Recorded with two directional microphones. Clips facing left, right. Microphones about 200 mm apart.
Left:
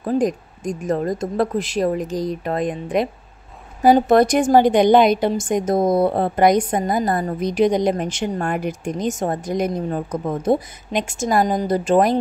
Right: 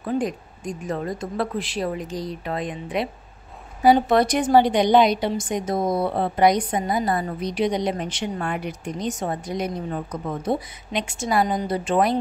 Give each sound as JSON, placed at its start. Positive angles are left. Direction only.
{"t": 0.0, "sound": "a woman's voice", "side_deg": 40}